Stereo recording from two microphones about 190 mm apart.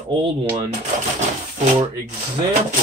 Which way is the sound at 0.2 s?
25° right (ahead or behind).